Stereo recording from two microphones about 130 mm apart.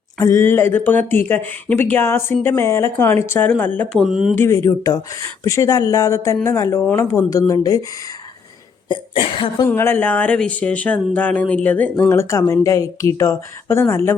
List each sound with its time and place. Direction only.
0.2 s speech: 25° left (ahead or behind)
4.0 s speech: 5° right (ahead or behind)
4.4 s speech: 20° left (ahead or behind)
9.6 s speech: 15° left (ahead or behind)